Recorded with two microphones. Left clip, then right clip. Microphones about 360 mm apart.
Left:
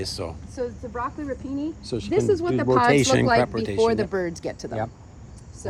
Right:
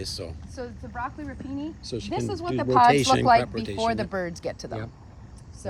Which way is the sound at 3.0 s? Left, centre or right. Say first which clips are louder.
Even; centre.